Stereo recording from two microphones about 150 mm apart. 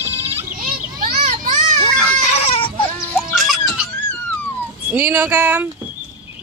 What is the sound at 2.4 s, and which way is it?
Goat, 40° left (ahead or behind).